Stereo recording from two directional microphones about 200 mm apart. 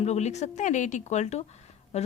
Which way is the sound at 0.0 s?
35° left (ahead or behind).